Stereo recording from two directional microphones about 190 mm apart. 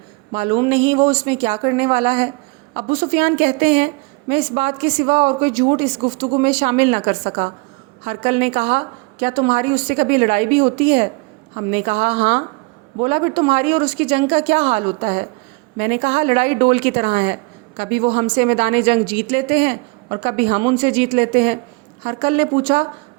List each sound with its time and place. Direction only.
0.3 s a woman's voice: 30° right (ahead or behind)